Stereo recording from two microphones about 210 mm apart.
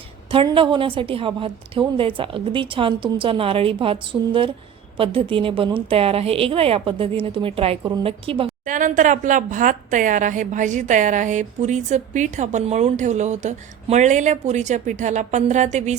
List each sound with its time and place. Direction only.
0.3 s a woman's voice: 25° right (ahead or behind)
8.6 s a woman's voice: 40° right (ahead or behind)